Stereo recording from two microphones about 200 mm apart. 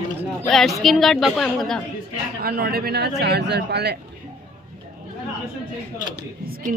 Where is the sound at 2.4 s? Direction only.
50° right (ahead or behind).